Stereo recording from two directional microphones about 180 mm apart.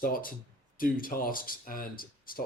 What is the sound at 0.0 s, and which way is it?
Speech, 50° left (ahead or behind).